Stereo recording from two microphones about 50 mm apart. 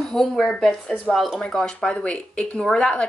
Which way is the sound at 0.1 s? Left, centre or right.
Centre.